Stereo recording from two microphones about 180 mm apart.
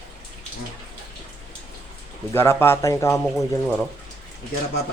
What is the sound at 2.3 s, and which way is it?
Speech, 15° left (ahead or behind).